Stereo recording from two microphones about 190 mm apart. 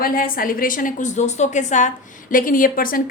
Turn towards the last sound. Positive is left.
turn(degrees=50)  # may be behind; listen again after turning